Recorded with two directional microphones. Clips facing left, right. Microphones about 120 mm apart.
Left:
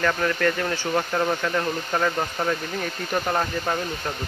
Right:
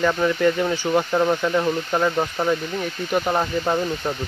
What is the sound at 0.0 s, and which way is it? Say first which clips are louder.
Speech: right 4 dB; 15° right (ahead or behind).